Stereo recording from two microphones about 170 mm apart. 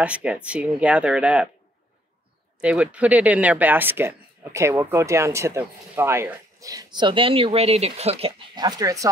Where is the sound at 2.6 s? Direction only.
10° right (ahead or behind); by 8.3 s 35° right (ahead or behind).